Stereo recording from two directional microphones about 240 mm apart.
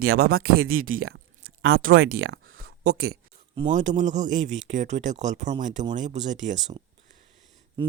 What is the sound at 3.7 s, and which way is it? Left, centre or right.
Speech, right.